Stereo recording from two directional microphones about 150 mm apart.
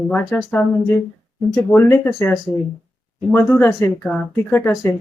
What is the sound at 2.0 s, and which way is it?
Speech, 15° left (ahead or behind).